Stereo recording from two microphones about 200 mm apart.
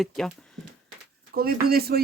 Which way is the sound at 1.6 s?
50° right (ahead or behind).